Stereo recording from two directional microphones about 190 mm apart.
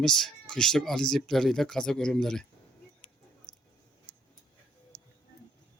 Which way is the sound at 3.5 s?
20° left (ahead or behind).